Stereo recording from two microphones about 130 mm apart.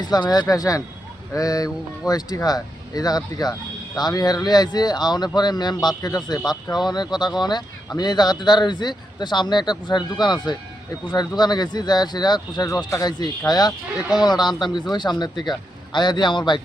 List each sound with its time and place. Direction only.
0.0 s speech: 30° left (ahead or behind)